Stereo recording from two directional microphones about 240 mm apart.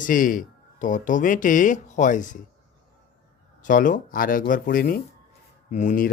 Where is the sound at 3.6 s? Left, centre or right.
Left.